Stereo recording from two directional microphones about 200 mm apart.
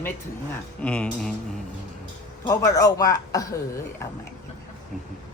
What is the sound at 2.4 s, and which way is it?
A man's voice, 15° left (ahead or behind).